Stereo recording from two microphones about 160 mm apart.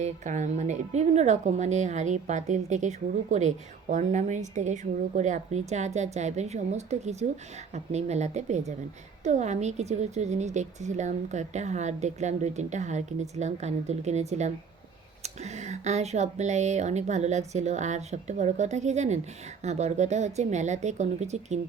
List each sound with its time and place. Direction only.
0.0 s a woman's voice: 50° right (ahead or behind)